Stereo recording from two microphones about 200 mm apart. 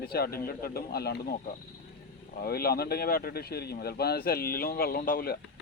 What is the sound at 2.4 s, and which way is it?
Speech, 50° left (ahead or behind).